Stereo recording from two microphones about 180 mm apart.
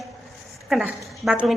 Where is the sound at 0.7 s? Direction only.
Centre (ahead or behind).